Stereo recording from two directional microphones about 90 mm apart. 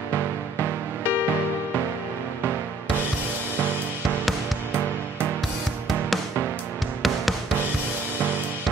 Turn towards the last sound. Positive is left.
turn(degrees=0)  # may be behind; listen again after turning